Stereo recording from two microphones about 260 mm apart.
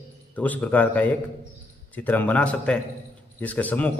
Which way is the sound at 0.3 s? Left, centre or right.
Centre.